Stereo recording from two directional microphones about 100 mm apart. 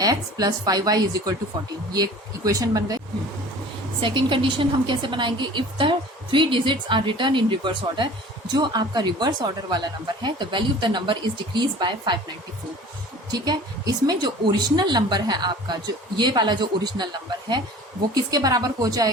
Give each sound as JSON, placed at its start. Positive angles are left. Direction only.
{"t": 0.0, "sound": "a woman's voice", "side_deg": -40}
{"t": 4.0, "sound": "a woman's voice", "side_deg": -55}
{"t": 13.3, "sound": "a woman's voice", "side_deg": -40}
{"t": 18.1, "sound": "a woman's voice", "side_deg": -40}